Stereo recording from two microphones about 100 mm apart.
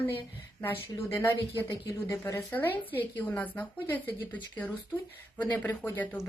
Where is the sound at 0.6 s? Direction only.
25° left (ahead or behind).